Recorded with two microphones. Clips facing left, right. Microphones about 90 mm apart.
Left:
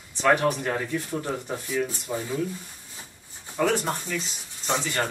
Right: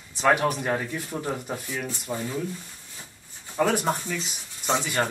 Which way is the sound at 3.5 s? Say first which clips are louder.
Right 1 dB; 10° right (ahead or behind).